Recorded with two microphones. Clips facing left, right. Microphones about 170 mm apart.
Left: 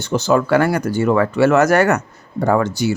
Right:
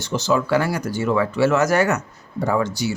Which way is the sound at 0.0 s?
55° left (ahead or behind).